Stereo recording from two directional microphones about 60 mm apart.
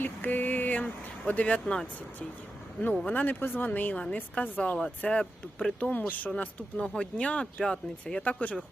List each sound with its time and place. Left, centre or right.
0.0 s a sound: left
1.3 s speech: left
3.1 s speech: left
3.7 s speech: left
8.2 s speech: left